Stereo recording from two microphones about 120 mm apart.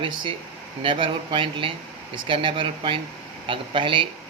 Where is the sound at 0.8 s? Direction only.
45° right (ahead or behind).